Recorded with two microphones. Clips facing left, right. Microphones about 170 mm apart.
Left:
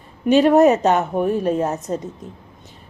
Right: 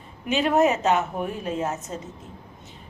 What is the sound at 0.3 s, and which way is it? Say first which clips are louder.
A woman's voice: left 8 dB; 35° left (ahead or behind).